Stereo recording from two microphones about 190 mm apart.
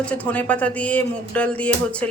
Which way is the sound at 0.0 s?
5° left (ahead or behind).